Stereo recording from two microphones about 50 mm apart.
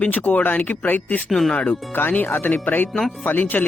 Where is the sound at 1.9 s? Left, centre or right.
Left.